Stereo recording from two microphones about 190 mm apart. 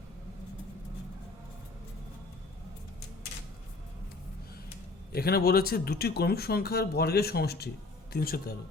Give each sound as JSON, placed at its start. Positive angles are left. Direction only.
{"t": 5.1, "sound": "a man's voice", "side_deg": 55}